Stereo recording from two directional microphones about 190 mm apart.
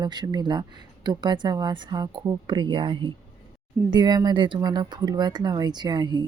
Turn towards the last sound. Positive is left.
turn(degrees=-25)  # may be behind; listen again after turning